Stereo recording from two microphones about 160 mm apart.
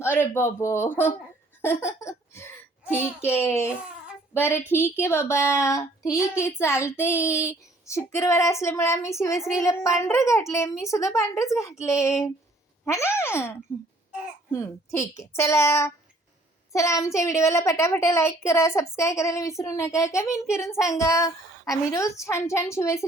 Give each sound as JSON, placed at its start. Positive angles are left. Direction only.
{"t": 0.2, "sound": "a woman's voice", "side_deg": 15}
{"t": 1.6, "sound": "a sound", "side_deg": 15}
{"t": 2.9, "sound": "a woman's voice", "side_deg": 15}